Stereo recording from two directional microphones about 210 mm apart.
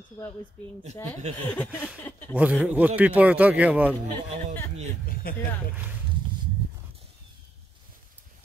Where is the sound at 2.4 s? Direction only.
5° right (ahead or behind).